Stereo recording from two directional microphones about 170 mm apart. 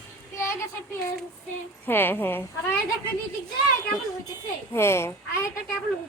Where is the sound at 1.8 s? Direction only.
10° left (ahead or behind).